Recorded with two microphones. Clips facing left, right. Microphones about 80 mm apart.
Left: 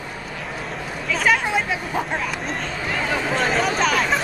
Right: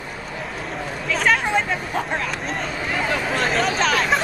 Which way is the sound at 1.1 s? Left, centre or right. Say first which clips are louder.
Even; centre.